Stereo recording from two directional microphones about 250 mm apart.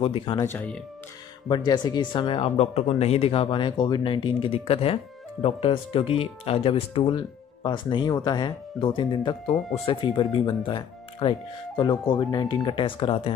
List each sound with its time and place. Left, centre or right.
0.0 s speech: centre
9.6 s speech: centre
9.8 s speech: centre